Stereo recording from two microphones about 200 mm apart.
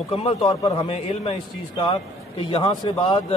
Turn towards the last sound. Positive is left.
turn(degrees=25)  # may be behind; listen again after turning